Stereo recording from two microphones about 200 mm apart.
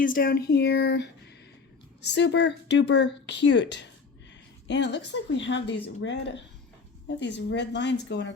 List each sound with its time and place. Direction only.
0.0 s speech: 45° left (ahead or behind)